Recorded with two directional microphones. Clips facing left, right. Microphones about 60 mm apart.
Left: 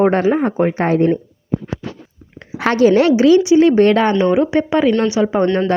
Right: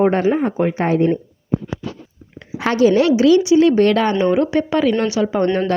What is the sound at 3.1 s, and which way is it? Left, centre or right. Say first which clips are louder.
Speech: left 2 dB; left.